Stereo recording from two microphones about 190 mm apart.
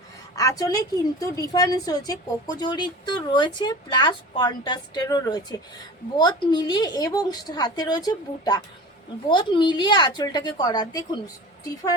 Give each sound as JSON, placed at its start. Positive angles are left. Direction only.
{"t": 0.3, "sound": "a woman's voice", "side_deg": 20}